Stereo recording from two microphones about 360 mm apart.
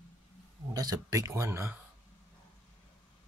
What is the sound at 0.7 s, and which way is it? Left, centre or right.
Speech, centre.